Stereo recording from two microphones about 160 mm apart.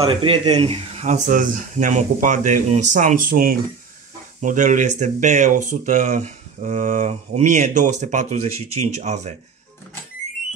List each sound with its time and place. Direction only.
0.0 s speech: 30° right (ahead or behind)